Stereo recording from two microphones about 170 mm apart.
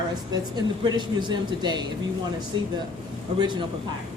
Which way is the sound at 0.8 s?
25° right (ahead or behind).